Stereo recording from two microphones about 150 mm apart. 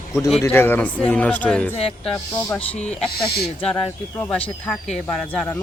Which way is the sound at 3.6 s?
5° left (ahead or behind).